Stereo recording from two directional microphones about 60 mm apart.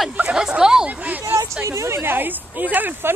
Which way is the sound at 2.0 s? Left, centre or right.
Right.